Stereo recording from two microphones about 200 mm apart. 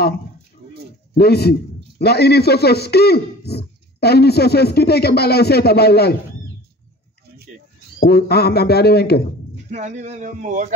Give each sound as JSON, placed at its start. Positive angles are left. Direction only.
{"t": 1.1, "sound": "a man's voice", "side_deg": 55}
{"t": 8.0, "sound": "a man's voice", "side_deg": 55}
{"t": 9.7, "sound": "speech", "side_deg": -35}